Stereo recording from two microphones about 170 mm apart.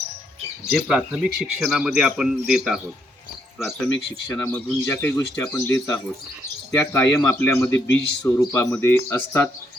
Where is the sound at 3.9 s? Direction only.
90° left.